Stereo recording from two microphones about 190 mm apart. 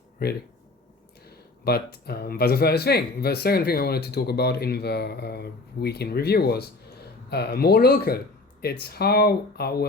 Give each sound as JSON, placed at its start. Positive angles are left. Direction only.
{"t": 0.2, "sound": "speech", "side_deg": 55}